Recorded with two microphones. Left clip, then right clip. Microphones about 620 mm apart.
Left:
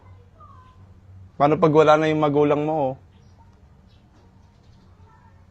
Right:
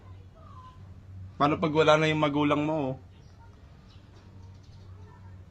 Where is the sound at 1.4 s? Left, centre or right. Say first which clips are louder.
Left 9 dB; centre.